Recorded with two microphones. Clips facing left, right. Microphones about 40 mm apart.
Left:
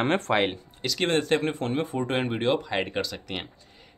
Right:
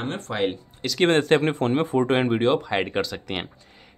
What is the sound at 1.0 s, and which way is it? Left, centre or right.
Speech, right.